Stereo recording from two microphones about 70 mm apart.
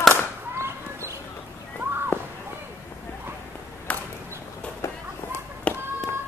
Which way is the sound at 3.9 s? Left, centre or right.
Left.